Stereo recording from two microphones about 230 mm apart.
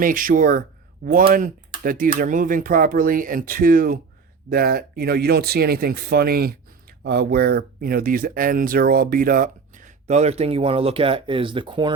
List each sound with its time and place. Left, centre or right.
0.0 s speech: right